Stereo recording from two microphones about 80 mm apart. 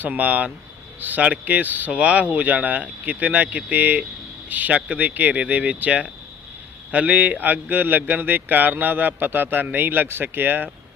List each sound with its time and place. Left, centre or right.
0.0 s a man's voice: centre